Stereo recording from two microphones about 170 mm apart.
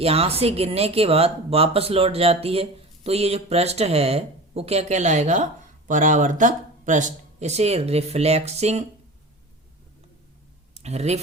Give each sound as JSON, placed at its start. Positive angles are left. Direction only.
{"t": 0.0, "sound": "speech", "side_deg": -35}
{"t": 10.8, "sound": "speech", "side_deg": -40}